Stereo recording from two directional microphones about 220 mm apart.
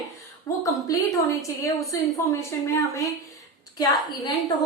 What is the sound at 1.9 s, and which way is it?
A woman's voice, 15° left (ahead or behind).